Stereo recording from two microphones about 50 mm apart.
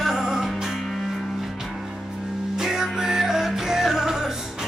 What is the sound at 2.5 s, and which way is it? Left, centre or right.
Music, centre.